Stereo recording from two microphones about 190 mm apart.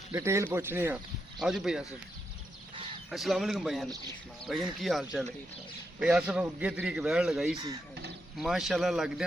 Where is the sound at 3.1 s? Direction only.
Centre (ahead or behind).